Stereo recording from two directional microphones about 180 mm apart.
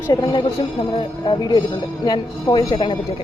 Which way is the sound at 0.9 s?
25° left (ahead or behind).